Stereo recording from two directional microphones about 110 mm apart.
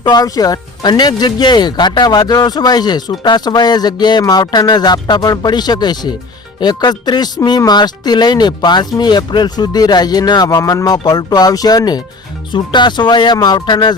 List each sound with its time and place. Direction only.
0.0 s speech: 35° left (ahead or behind)